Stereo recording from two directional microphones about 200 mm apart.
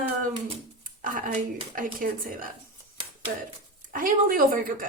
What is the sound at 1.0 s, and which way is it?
A woman's voice, 45° right (ahead or behind).